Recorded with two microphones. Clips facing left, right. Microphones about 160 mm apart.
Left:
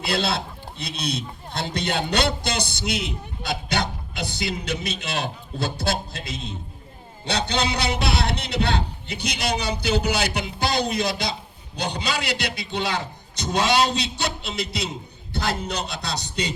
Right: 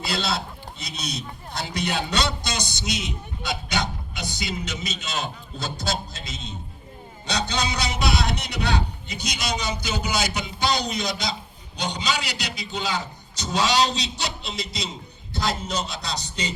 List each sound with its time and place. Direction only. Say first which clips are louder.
0.1 s a man's voice: left 4 dB; 55° left (ahead or behind)